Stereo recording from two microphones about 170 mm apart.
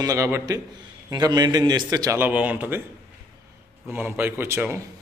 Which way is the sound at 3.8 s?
15° right (ahead or behind).